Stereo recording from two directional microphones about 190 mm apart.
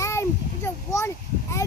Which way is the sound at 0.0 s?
15° left (ahead or behind).